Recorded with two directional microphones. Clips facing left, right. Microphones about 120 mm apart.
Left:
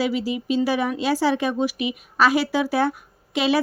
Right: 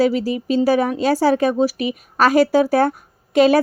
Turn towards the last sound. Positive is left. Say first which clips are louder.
# right 8 dB
turn(degrees=-45)  # may be behind; listen again after turning